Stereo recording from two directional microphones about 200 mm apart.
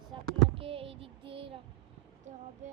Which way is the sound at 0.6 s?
25° right (ahead or behind).